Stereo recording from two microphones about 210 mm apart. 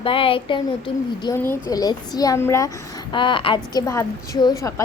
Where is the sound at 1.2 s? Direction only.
10° left (ahead or behind).